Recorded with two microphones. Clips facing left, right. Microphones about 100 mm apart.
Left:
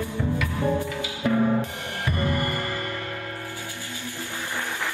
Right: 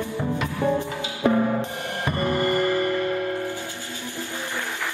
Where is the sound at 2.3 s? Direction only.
20° right (ahead or behind).